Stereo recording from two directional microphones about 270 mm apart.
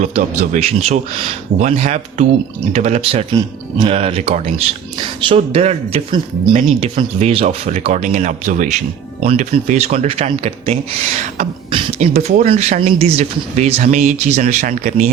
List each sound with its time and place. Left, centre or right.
0.0 s speech: right